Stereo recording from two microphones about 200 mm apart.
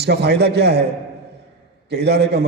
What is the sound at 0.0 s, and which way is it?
Speech, 55° right (ahead or behind).